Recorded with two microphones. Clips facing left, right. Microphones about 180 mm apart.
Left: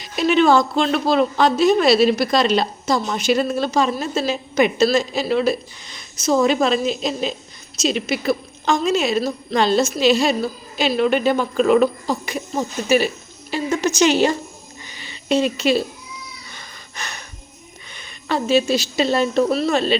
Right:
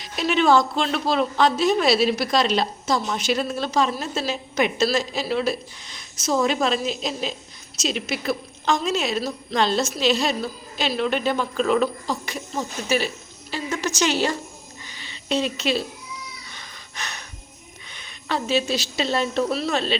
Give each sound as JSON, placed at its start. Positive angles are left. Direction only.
{"t": 0.0, "sound": "a woman's voice", "side_deg": 0}
{"t": 13.5, "sound": "a woman's voice", "side_deg": 20}
{"t": 14.8, "sound": "a sound", "side_deg": 10}
{"t": 17.9, "sound": "a woman's voice", "side_deg": 0}